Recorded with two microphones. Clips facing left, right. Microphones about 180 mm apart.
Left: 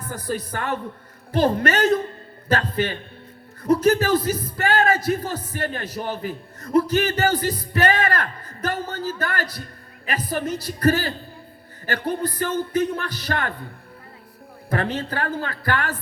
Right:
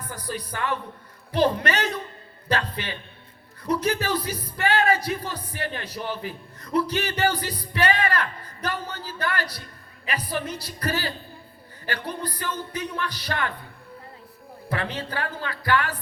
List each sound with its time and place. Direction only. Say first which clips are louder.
0.0 s speech: left 5 dB; 45° left (ahead or behind)
14.7 s speech: left 5 dB; 45° left (ahead or behind)